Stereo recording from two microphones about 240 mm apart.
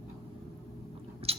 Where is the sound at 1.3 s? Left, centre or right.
Right.